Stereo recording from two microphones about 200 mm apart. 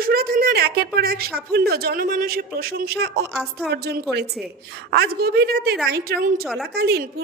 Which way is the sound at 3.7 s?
55° right (ahead or behind).